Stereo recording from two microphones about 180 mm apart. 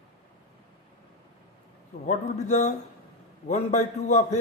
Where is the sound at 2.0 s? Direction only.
40° left (ahead or behind).